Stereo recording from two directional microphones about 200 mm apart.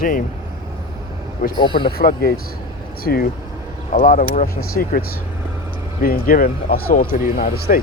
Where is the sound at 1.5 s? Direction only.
25° left (ahead or behind).